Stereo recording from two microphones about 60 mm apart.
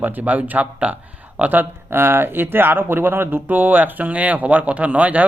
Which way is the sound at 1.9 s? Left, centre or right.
Right.